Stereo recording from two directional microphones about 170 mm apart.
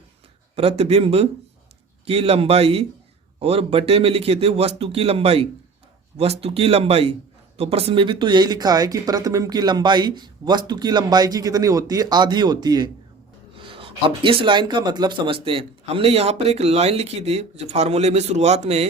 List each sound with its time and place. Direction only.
0.5 s a man's voice: 35° right (ahead or behind)